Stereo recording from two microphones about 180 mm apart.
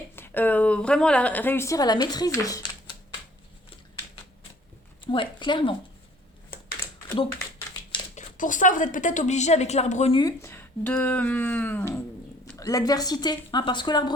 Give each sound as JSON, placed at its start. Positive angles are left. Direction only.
{"t": 0.2, "sound": "a woman's voice", "side_deg": 10}
{"t": 5.1, "sound": "speech", "side_deg": 25}
{"t": 8.1, "sound": "a woman's voice", "side_deg": 45}
{"t": 10.2, "sound": "a woman's voice", "side_deg": 15}
{"t": 12.5, "sound": "speech", "side_deg": 20}